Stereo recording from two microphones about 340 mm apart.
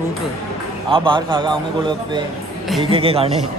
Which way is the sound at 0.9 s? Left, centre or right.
Centre.